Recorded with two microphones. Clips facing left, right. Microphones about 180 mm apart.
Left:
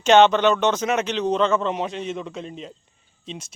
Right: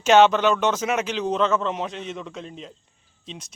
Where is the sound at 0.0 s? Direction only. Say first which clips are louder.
Left 1 dB; 5° right (ahead or behind).